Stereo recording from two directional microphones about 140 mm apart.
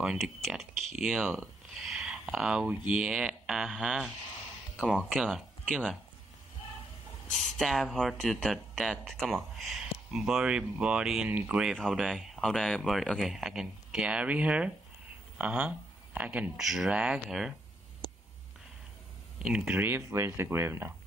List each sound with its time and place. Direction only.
0.0 s speech: centre (ahead or behind)
7.2 s speech: centre (ahead or behind)
19.3 s speech: 5° right (ahead or behind)